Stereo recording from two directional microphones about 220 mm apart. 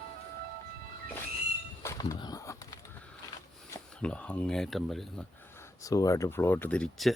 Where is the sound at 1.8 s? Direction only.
15° left (ahead or behind).